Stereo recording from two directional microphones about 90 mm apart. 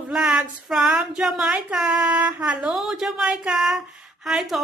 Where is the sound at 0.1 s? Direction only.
5° right (ahead or behind).